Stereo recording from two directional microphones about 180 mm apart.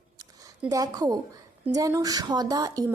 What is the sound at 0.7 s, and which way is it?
Speech, 20° right (ahead or behind).